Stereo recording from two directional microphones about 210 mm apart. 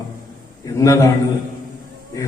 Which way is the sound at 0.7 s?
15° left (ahead or behind).